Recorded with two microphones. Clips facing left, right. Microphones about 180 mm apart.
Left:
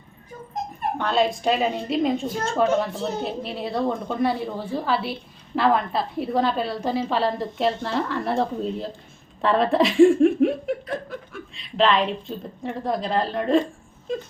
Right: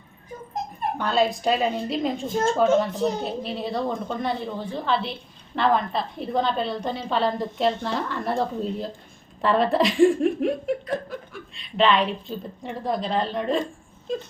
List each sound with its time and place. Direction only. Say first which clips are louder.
0.9 s speech: even; centre (ahead or behind)
2.9 s a woman's voice: right 4 dB; 15° right (ahead or behind)
3.2 s speech: even; centre (ahead or behind)